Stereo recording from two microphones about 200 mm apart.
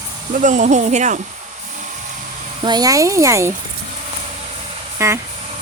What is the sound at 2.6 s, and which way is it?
Speech, 20° right (ahead or behind).